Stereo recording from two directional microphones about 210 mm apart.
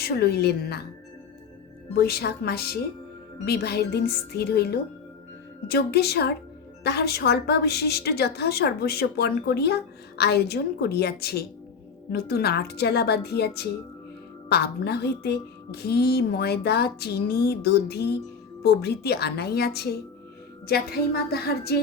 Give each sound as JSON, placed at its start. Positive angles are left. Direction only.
{"t": 0.0, "sound": "a woman's voice", "side_deg": 50}
{"t": 2.0, "sound": "a woman's voice", "side_deg": 50}